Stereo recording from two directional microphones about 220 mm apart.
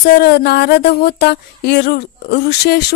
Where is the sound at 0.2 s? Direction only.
45° left (ahead or behind).